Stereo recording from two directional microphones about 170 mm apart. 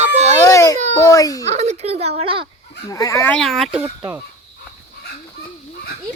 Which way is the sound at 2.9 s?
20° left (ahead or behind).